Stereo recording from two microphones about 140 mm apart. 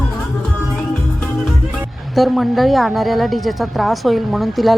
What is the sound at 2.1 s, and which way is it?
A woman's voice, centre (ahead or behind).